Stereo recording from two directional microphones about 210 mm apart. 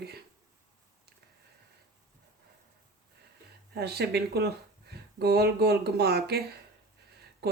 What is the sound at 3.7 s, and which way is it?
Speech, 50° right (ahead or behind).